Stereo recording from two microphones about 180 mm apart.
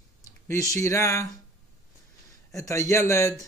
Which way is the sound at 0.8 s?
15° left (ahead or behind).